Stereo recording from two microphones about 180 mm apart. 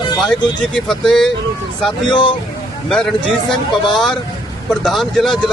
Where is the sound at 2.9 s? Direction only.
5° left (ahead or behind).